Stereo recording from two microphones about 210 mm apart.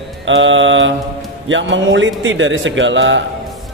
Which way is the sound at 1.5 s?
60° right (ahead or behind).